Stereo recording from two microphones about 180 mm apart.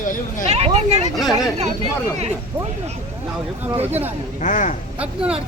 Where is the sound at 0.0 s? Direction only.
45° left (ahead or behind).